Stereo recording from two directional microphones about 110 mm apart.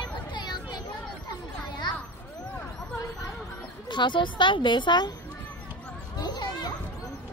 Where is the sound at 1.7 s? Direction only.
45° left (ahead or behind).